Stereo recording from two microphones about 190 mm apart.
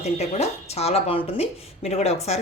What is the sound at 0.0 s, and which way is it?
A woman's voice, 35° left (ahead or behind).